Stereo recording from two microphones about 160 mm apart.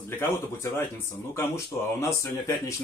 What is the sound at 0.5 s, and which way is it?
Speech, 20° left (ahead or behind).